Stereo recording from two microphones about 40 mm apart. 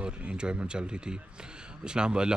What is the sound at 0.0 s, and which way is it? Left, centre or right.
Speech, right.